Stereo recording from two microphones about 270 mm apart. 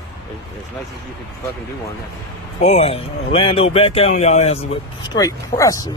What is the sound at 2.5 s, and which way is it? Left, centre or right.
Speech, left.